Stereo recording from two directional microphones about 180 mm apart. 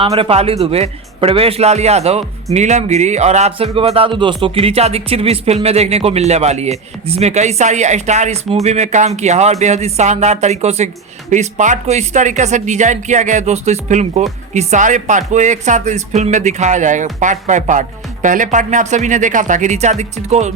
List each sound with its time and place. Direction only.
0.1 s a man's voice: 30° right (ahead or behind)